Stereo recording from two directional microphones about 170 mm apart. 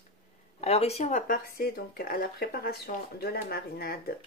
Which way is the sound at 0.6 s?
40° left (ahead or behind).